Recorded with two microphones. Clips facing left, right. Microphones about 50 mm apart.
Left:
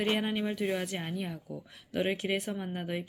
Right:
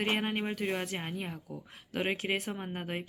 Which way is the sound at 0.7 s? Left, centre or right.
Right.